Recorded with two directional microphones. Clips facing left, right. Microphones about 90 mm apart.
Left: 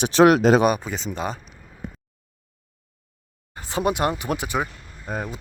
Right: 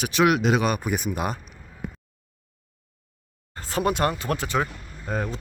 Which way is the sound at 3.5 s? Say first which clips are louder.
Left 1 dB; 15° left (ahead or behind).